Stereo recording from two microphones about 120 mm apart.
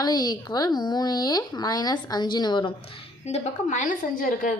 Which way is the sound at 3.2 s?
65° left (ahead or behind).